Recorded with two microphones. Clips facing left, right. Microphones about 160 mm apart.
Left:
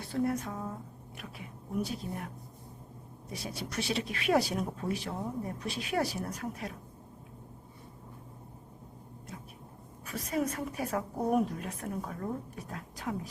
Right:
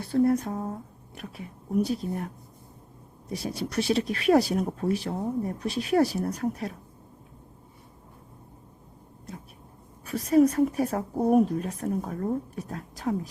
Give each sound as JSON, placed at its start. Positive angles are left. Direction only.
{"t": 0.1, "sound": "a woman's voice", "side_deg": -35}
{"t": 3.3, "sound": "a woman's voice", "side_deg": -40}
{"t": 10.1, "sound": "a woman's voice", "side_deg": -35}